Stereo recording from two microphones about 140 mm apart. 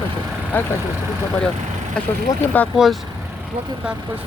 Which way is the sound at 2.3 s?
25° left (ahead or behind).